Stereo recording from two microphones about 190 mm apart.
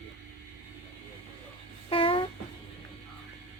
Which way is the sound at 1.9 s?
30° left (ahead or behind).